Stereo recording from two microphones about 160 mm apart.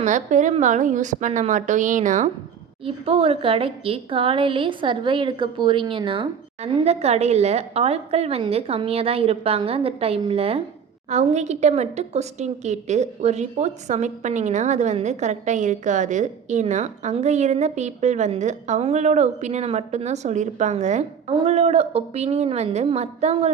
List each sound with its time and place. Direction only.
0.0 s a woman's voice: 50° right (ahead or behind)
2.8 s a woman's voice: 35° right (ahead or behind)